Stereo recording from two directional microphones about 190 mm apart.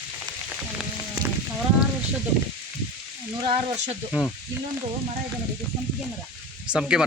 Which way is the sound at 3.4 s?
30° right (ahead or behind).